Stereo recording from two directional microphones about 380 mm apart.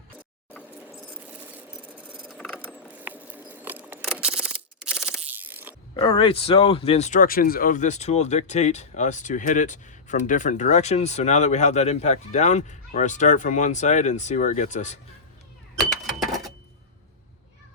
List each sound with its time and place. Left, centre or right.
1.5 s mechanisms: centre
6.0 s speech: centre
15.8 s a sound: centre